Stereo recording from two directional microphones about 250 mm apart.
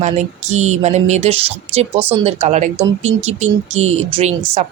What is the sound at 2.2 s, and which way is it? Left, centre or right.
A woman's voice, right.